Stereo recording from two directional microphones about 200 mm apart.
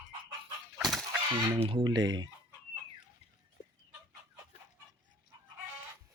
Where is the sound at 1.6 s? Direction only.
25° right (ahead or behind).